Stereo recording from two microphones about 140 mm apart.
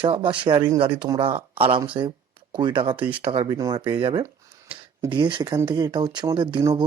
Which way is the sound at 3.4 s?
25° right (ahead or behind).